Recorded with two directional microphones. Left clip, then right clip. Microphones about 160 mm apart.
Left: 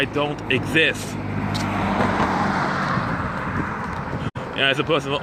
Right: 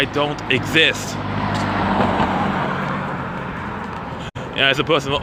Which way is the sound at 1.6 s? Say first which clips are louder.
Right 2 dB; 55° right (ahead or behind).